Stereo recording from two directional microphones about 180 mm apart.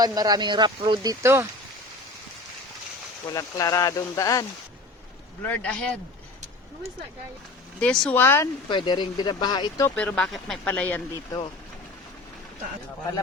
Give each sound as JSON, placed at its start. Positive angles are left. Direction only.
{"t": 0.0, "sound": "speech", "side_deg": -20}
{"t": 1.2, "sound": "speech", "side_deg": -15}
{"t": 3.3, "sound": "speech", "side_deg": 20}
{"t": 5.4, "sound": "speech", "side_deg": 10}
{"t": 7.8, "sound": "speech", "side_deg": 5}
{"t": 8.7, "sound": "speech", "side_deg": 25}
{"t": 9.9, "sound": "speech", "side_deg": 10}